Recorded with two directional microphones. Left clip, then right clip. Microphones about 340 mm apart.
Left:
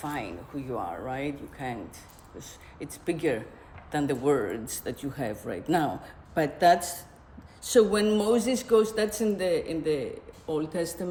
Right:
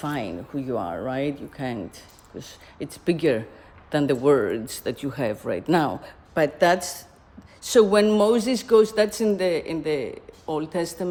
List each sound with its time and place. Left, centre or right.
0.0 s speech: right